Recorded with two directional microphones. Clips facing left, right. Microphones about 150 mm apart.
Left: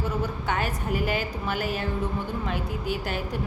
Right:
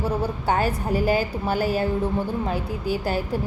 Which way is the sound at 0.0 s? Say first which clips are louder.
Right 4 dB; 35° right (ahead or behind).